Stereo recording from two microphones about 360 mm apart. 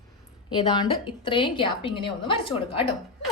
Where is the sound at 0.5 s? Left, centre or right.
Centre.